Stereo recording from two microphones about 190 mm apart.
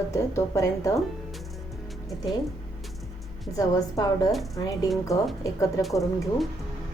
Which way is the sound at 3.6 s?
20° left (ahead or behind).